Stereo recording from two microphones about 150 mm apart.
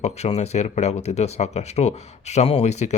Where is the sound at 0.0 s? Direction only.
45° left (ahead or behind).